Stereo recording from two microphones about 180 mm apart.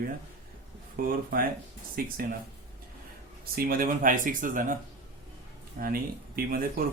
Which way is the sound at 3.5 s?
55° right (ahead or behind).